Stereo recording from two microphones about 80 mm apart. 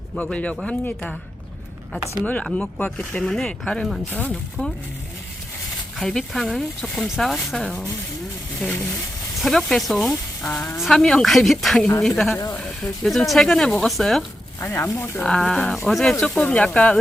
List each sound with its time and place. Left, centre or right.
0.2 s speech: centre
2.2 s speech: centre
4.1 s speech: centre
6.0 s speech: centre
9.4 s speech: centre
14.6 s speech: left
15.2 s speech: centre
15.7 s speech: centre
16.2 s speech: centre